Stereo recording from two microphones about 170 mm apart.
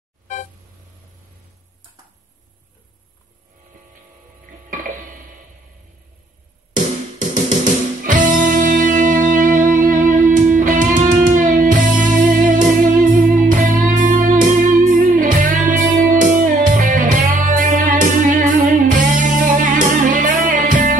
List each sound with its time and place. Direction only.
4.6 s music: 50° right (ahead or behind)
8.0 s music: 50° right (ahead or behind)